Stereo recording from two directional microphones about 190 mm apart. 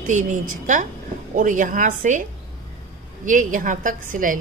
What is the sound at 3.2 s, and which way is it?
A woman's voice, 45° right (ahead or behind).